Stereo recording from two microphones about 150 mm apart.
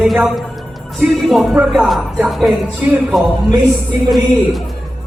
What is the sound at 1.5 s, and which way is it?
Speech, 5° right (ahead or behind).